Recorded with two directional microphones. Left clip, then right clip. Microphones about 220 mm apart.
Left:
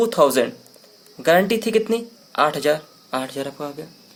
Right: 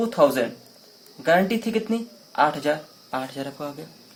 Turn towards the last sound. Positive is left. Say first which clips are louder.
# left 4 dB
turn(degrees=35)  # may be behind; listen again after turning